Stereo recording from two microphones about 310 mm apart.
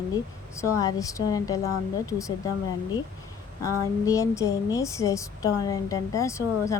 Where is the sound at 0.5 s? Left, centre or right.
Centre.